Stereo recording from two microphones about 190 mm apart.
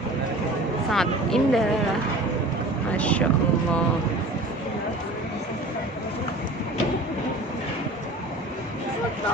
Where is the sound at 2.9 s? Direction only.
5° left (ahead or behind).